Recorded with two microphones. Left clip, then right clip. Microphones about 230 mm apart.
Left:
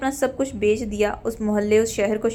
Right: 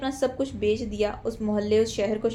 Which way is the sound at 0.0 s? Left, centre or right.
Left.